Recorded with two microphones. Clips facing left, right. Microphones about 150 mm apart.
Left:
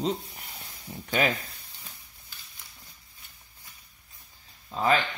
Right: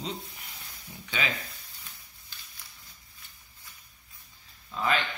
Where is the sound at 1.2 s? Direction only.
50° left (ahead or behind).